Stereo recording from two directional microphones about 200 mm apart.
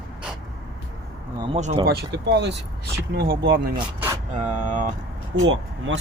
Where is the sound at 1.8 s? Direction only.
55° right (ahead or behind).